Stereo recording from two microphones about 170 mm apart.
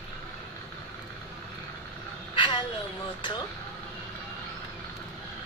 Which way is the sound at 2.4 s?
30° left (ahead or behind).